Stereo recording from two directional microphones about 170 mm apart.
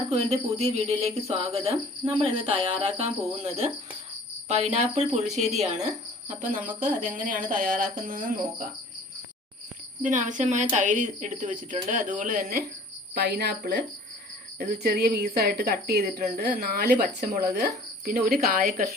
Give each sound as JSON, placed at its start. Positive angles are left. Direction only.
{"t": 0.1, "sound": "a sound", "side_deg": -40}
{"t": 6.7, "sound": "speech", "side_deg": -50}
{"t": 10.1, "sound": "speech", "side_deg": -45}
{"t": 13.1, "sound": "speech", "side_deg": -75}
{"t": 14.6, "sound": "speech", "side_deg": -65}
{"t": 17.2, "sound": "speech", "side_deg": -45}
{"t": 18.0, "sound": "speech", "side_deg": -60}